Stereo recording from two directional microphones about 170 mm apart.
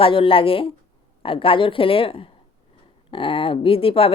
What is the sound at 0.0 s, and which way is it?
Speech, 30° left (ahead or behind).